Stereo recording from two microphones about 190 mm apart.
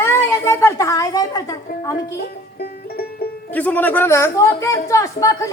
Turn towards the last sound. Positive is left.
turn(degrees=15)  # may be behind; listen again after turning